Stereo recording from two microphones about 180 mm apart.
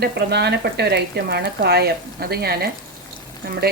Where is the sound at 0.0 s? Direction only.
65° right (ahead or behind).